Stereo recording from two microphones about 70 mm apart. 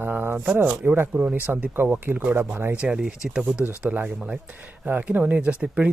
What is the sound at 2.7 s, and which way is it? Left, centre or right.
Speech, centre.